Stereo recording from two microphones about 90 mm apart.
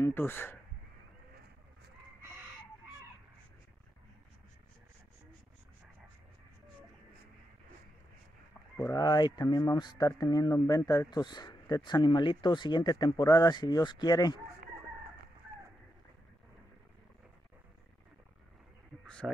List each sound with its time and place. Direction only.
0.0 s speech: 25° left (ahead or behind)
8.7 s speech: 35° left (ahead or behind)
9.0 s speech: 50° left (ahead or behind)
11.1 s speech: 55° left (ahead or behind)
19.2 s speech: 5° right (ahead or behind)